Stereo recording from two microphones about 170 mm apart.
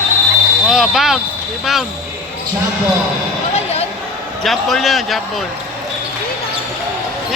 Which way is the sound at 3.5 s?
40° left (ahead or behind).